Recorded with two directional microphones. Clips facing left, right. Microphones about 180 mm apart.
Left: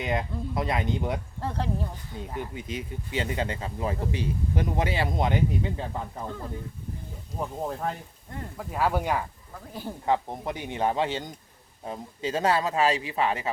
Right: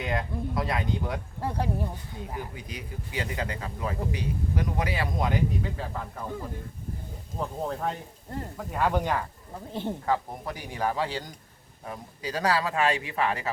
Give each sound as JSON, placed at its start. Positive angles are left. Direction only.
{"t": 0.0, "sound": "speech", "side_deg": 20}
{"t": 1.4, "sound": "speech", "side_deg": -10}
{"t": 2.4, "sound": "speech", "side_deg": 25}
{"t": 7.3, "sound": "speech", "side_deg": 5}
{"t": 10.1, "sound": "speech", "side_deg": 20}